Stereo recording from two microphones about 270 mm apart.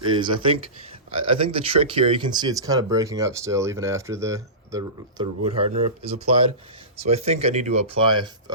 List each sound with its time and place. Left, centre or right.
0.1 s speech: centre